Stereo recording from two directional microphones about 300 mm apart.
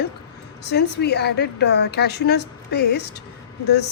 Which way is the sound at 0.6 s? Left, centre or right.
Left.